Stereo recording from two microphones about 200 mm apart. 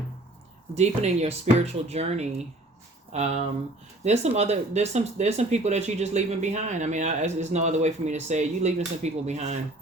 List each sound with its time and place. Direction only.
0.8 s speech: 30° right (ahead or behind)